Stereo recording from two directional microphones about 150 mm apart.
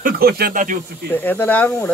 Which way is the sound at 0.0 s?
90° right.